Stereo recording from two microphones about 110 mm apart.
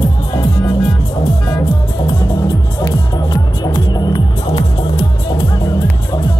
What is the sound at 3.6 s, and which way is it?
Music, 40° left (ahead or behind).